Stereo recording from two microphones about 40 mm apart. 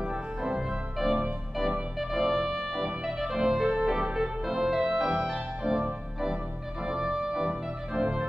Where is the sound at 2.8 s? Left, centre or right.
Centre.